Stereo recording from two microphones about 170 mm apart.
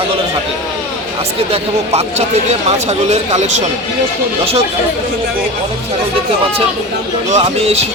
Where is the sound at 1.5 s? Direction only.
40° right (ahead or behind).